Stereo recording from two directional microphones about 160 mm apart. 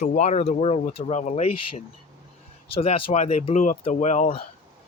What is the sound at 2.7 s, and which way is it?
Speech, 35° left (ahead or behind).